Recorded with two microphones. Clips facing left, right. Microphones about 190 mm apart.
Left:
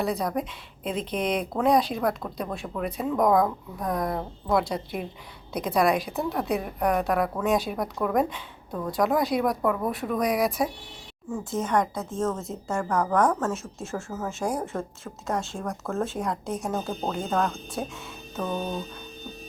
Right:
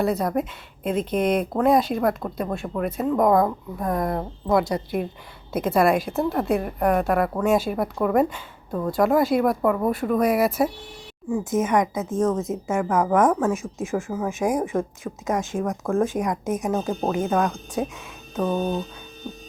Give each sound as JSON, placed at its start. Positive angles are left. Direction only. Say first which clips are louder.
{"t": 0.0, "sound": "a woman's voice", "louder": "right 4 dB", "side_deg": 0}
{"t": 11.3, "sound": "speech", "louder": "right 6 dB", "side_deg": -15}
{"t": 12.6, "sound": "a woman's voice", "louder": "right 3 dB", "side_deg": 0}
{"t": 13.0, "sound": "speech", "louder": "right 4 dB", "side_deg": -20}